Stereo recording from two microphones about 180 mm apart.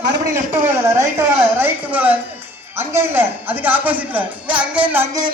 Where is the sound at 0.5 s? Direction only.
15° right (ahead or behind).